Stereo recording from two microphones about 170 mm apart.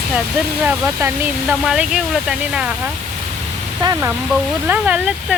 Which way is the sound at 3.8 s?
25° right (ahead or behind).